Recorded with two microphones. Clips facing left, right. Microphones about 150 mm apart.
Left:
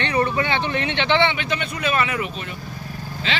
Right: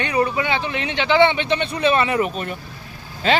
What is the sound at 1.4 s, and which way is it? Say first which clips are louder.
Speech: right 5 dB; 30° right (ahead or behind).